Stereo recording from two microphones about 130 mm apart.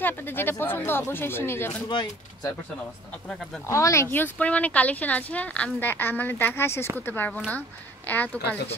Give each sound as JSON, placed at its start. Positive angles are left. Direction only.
{"t": 0.0, "sound": "speech", "side_deg": 15}
{"t": 1.9, "sound": "speech", "side_deg": 35}
{"t": 3.1, "sound": "speech", "side_deg": 5}
{"t": 3.6, "sound": "speech", "side_deg": 25}